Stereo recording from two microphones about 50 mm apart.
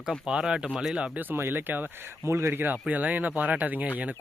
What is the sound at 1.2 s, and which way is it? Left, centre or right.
Speech, right.